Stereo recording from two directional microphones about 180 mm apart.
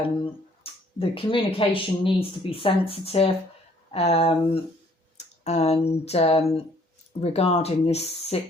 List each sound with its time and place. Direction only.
0.6 s speech: 30° left (ahead or behind)